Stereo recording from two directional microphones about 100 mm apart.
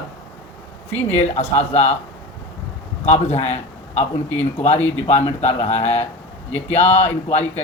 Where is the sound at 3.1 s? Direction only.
90° left.